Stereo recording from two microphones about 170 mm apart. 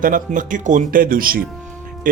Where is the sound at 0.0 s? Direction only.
50° right (ahead or behind).